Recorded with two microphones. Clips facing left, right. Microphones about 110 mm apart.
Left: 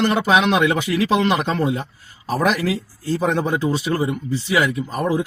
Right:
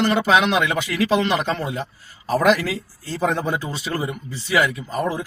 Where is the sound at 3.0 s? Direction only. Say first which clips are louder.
Left 2 dB; 15° left (ahead or behind).